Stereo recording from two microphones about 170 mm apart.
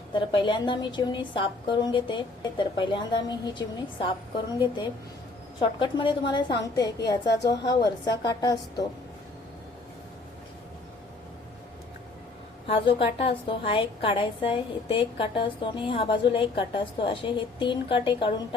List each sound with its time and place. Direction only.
0.1 s a woman's voice: 30° left (ahead or behind)
12.6 s a woman's voice: 35° left (ahead or behind)